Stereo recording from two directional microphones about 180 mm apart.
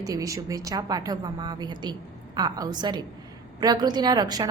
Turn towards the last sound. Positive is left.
turn(degrees=-20)  # may be behind; listen again after turning